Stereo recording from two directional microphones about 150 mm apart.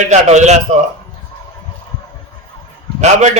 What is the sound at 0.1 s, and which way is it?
Speech, 50° right (ahead or behind).